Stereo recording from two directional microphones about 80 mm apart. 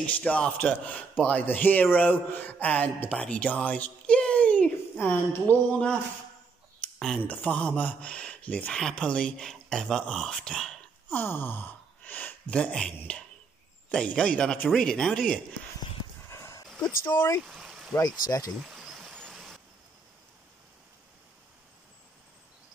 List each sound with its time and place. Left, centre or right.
0.0 s a man's voice: centre
4.9 s a woman's voice: left
6.8 s a sound: centre
7.2 s a man's voice: centre
11.1 s a man's voice: left; by 15.3 s centre
16.3 s dog: left
17.0 s speech: left
17.4 s a sound: centre
17.9 s speech: left
18.6 s stream: centre